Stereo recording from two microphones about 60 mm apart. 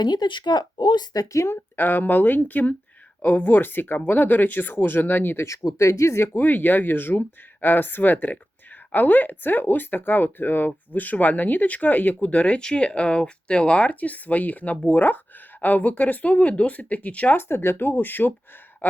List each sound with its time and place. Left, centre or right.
1.1 s speech: left
1.7 s speech: left
5.5 s speech: left
17.3 s speech: left